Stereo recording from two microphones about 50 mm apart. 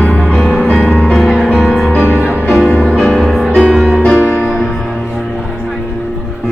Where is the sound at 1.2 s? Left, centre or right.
Centre.